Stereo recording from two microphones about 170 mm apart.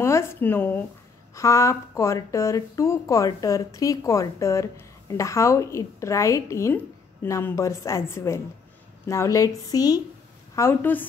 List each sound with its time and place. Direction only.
0.0 s a woman's voice: 15° left (ahead or behind)